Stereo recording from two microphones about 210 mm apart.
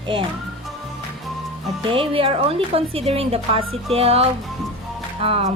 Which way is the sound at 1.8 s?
25° right (ahead or behind).